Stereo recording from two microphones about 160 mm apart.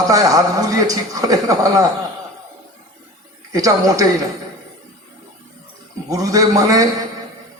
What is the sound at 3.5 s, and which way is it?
Speech, 20° right (ahead or behind).